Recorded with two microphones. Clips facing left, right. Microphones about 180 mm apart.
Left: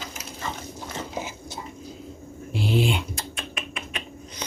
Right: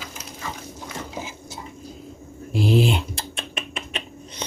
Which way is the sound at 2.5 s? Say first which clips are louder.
Right 4 dB; 40° right (ahead or behind).